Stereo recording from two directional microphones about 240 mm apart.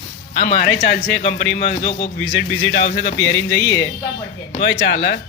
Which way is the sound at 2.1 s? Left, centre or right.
Left.